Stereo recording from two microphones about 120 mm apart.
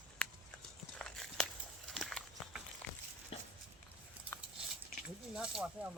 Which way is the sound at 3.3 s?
55° left (ahead or behind).